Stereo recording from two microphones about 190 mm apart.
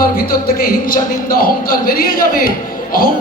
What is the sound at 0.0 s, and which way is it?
Speech, 50° left (ahead or behind).